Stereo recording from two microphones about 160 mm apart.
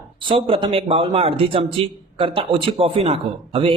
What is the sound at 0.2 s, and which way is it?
A man's voice, 35° right (ahead or behind).